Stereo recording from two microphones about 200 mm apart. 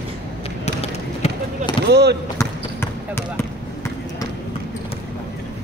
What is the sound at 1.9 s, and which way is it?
Speech, 55° right (ahead or behind).